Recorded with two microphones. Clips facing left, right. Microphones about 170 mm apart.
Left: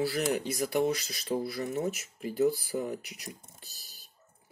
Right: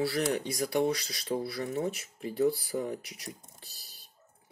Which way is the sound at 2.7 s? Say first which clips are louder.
Even; 10° left (ahead or behind).